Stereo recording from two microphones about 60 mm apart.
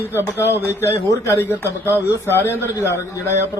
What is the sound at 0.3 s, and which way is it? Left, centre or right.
A man's voice, left.